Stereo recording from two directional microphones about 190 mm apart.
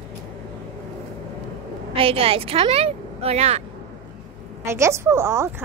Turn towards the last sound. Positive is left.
turn(degrees=-15)  # may be behind; listen again after turning